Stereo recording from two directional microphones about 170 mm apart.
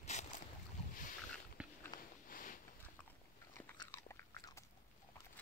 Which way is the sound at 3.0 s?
10° left (ahead or behind).